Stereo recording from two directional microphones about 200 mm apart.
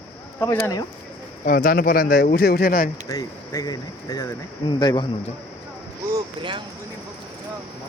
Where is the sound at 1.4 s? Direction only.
45° left (ahead or behind).